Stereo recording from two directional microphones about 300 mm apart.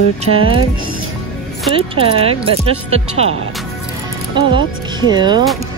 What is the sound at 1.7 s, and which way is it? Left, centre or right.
Speech, centre.